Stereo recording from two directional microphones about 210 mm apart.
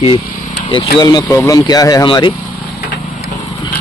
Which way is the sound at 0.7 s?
20° left (ahead or behind).